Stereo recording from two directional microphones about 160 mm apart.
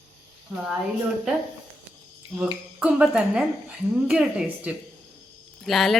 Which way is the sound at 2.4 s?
5° right (ahead or behind).